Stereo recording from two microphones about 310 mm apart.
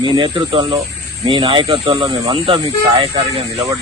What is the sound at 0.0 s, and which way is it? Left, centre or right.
Speech, centre.